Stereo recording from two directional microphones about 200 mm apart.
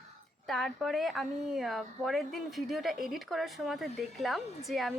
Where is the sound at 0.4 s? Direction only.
Centre (ahead or behind).